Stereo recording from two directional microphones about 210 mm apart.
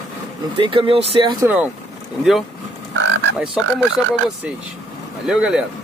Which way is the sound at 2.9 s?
65° right (ahead or behind).